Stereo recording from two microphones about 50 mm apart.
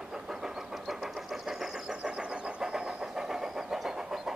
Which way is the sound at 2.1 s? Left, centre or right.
Right.